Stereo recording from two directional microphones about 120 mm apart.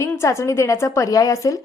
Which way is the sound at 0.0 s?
25° left (ahead or behind).